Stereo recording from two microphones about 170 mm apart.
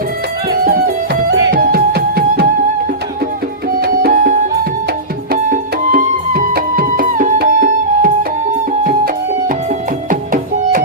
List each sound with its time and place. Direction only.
0.6 s music: 60° right (ahead or behind)
3.7 s music: 65° right (ahead or behind)
10.1 s music: 50° right (ahead or behind)